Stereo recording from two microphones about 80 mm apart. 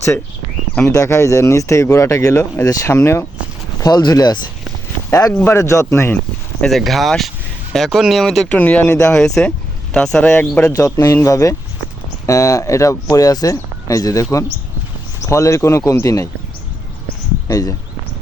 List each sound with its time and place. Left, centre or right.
0.9 s speech: left
3.8 s speech: left
5.5 s speech: left
6.7 s speech: centre
8.4 s speech: centre
9.1 s speech: centre
10.7 s speech: left
17.5 s speech: left